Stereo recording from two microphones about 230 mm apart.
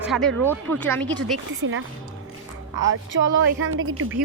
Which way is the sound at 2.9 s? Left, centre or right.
Right.